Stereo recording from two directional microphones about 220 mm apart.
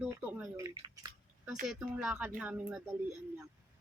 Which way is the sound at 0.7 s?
25° right (ahead or behind).